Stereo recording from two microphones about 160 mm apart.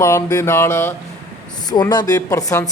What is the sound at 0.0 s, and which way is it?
Speech, 20° left (ahead or behind).